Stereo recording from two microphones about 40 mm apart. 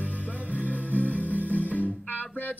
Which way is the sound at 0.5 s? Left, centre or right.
Right.